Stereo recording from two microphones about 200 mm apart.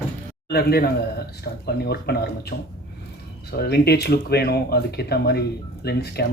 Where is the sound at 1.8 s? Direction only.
55° left (ahead or behind).